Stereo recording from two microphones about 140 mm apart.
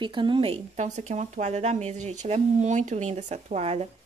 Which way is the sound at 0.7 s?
60° right (ahead or behind).